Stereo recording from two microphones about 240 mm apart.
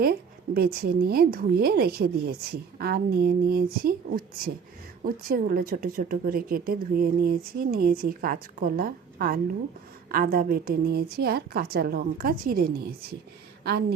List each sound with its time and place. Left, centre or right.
0.0 s a woman's voice: right